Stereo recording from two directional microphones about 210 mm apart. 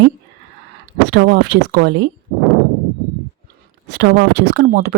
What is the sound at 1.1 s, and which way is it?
Speech, 50° right (ahead or behind).